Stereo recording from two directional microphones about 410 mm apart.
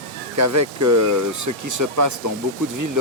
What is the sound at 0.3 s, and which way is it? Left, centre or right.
Speech, right.